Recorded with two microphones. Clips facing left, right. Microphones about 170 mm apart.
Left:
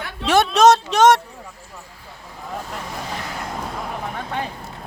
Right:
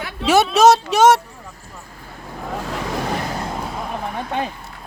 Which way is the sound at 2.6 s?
90° right.